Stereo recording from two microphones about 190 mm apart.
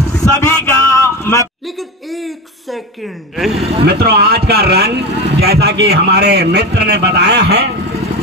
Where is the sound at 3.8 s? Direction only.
55° right (ahead or behind).